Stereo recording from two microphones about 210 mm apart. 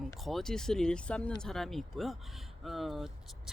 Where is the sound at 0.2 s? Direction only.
Centre (ahead or behind).